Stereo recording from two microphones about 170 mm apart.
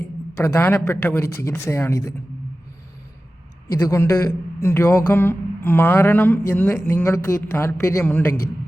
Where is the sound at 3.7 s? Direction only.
15° left (ahead or behind).